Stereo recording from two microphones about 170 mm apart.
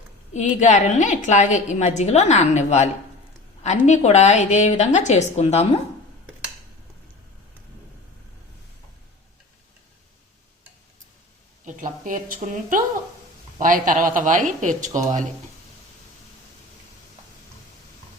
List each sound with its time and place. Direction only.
0.3 s a woman's voice: 45° left (ahead or behind)
11.6 s speech: 50° right (ahead or behind)